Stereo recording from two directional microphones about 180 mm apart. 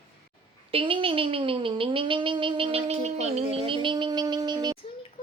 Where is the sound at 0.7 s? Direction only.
30° right (ahead or behind).